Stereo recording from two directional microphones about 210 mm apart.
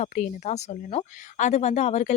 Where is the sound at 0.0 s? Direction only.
35° left (ahead or behind).